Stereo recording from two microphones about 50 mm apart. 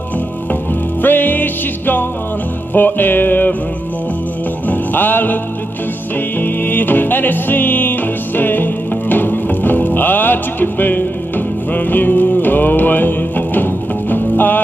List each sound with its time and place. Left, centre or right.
1.0 s music: left
4.6 s music: left